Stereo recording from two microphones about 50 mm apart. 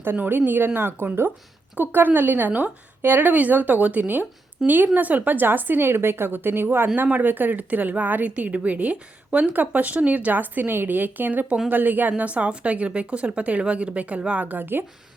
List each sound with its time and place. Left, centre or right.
0.0 s speech: right
1.8 s a woman's voice: right